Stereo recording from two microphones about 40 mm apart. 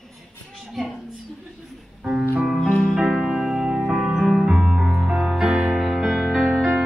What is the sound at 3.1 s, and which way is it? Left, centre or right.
Music, centre.